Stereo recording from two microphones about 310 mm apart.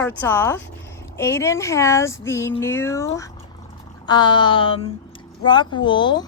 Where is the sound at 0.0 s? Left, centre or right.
Centre.